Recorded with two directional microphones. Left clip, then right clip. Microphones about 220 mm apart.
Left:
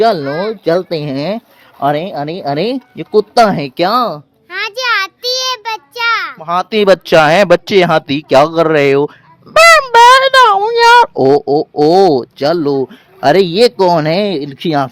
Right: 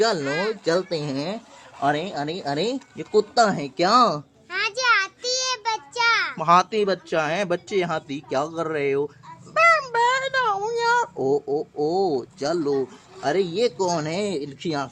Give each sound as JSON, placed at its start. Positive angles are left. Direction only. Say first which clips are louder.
{"t": 0.0, "sound": "speech", "louder": "left 10 dB", "side_deg": 30}
{"t": 3.8, "sound": "speech", "louder": "left 4 dB", "side_deg": 15}
{"t": 4.4, "sound": "child singing", "louder": "left 6 dB", "side_deg": 45}
{"t": 6.7, "sound": "speech", "louder": "left 14 dB", "side_deg": 40}